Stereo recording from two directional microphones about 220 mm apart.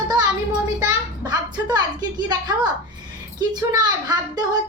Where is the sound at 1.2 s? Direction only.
20° right (ahead or behind).